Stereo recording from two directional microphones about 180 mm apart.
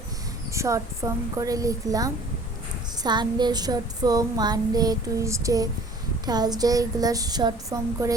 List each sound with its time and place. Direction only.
0.5 s child singing: 15° right (ahead or behind)